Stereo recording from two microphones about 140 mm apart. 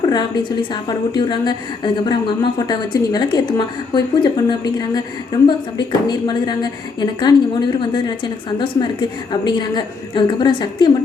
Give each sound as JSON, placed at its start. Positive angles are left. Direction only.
{"t": 0.1, "sound": "a woman's voice", "side_deg": 30}